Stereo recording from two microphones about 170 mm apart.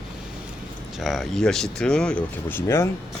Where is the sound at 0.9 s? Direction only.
Centre (ahead or behind).